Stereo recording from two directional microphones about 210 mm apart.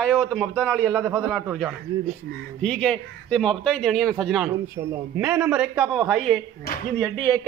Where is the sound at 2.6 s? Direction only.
5° left (ahead or behind).